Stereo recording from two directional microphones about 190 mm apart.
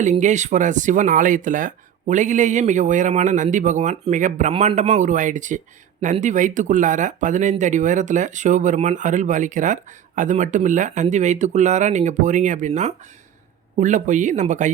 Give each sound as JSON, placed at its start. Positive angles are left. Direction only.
{"t": 0.0, "sound": "speech", "side_deg": -40}